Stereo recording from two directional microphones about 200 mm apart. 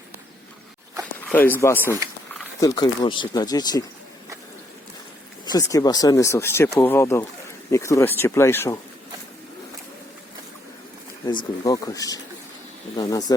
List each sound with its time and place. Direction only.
1.3 s speech: 10° left (ahead or behind)
5.5 s speech: 15° left (ahead or behind)
11.3 s speech: 20° left (ahead or behind)